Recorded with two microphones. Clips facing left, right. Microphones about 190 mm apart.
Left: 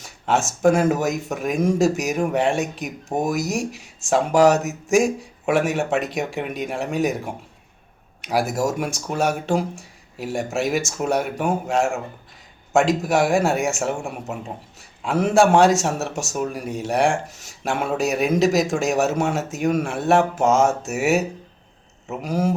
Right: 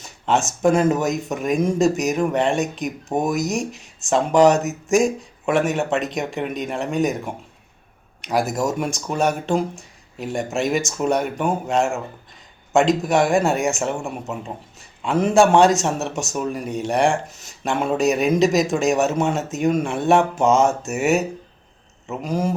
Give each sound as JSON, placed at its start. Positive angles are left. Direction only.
{"t": 0.0, "sound": "a sound", "side_deg": 10}
{"t": 0.6, "sound": "a man's voice", "side_deg": 10}
{"t": 8.2, "sound": "a man's voice", "side_deg": 5}